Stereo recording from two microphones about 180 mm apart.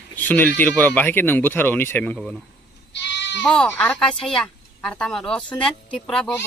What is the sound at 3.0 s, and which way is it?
Goat, 75° left (ahead or behind).